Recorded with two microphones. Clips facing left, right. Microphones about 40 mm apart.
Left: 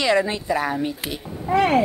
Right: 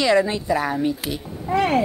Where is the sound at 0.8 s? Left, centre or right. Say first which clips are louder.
Right 4 dB; left.